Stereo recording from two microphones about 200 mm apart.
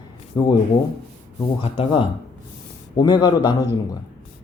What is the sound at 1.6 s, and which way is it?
Speech, 25° left (ahead or behind).